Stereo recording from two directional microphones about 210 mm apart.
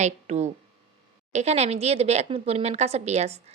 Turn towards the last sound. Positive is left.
turn(degrees=-30)  # may be behind; listen again after turning